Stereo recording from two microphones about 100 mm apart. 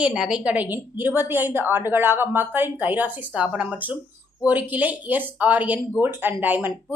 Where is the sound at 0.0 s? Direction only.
5° right (ahead or behind).